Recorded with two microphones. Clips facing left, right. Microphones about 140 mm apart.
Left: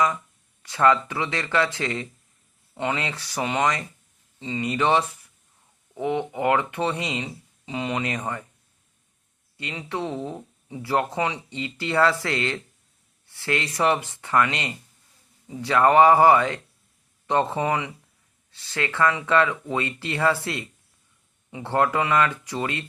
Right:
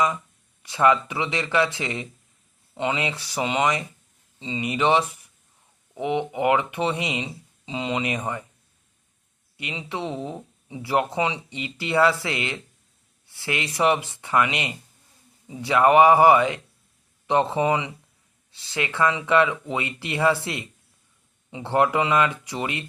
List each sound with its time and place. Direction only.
0.6 s speech: 15° right (ahead or behind)
9.6 s speech: 15° right (ahead or behind)